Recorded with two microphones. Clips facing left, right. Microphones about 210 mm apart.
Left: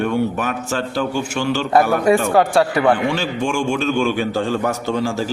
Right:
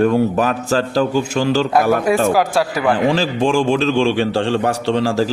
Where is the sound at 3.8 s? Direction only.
30° right (ahead or behind).